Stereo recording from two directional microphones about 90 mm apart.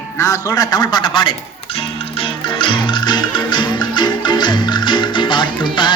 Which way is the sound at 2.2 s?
75° left (ahead or behind).